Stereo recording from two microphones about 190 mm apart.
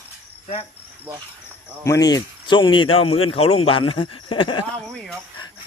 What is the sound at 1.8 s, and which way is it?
Speech, 15° left (ahead or behind).